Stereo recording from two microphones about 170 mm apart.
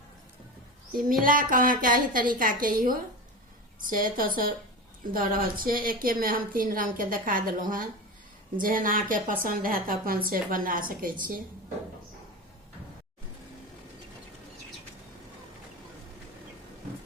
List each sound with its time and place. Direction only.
1.2 s a woman's voice: 55° right (ahead or behind)